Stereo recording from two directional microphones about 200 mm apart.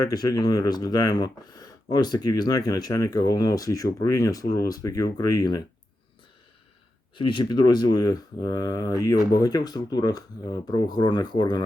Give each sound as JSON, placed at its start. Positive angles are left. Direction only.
{"t": 0.1, "sound": "speech", "side_deg": 20}
{"t": 7.2, "sound": "speech", "side_deg": 25}